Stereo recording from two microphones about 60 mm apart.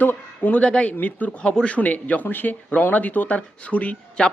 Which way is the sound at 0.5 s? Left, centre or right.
Centre.